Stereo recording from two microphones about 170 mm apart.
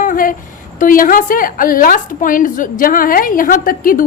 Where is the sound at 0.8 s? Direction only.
50° left (ahead or behind).